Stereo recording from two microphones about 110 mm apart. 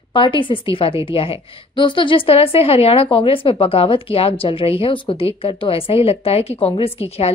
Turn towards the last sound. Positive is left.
turn(degrees=65)  # may be behind; listen again after turning